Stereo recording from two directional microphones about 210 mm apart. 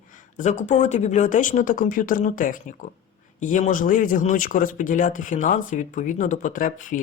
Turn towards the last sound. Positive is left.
turn(degrees=40)  # may be behind; listen again after turning